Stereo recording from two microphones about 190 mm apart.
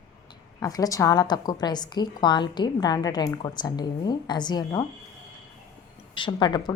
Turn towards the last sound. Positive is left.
turn(degrees=20)  # may be behind; listen again after turning